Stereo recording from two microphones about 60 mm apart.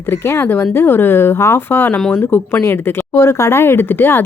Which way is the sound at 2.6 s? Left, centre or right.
Left.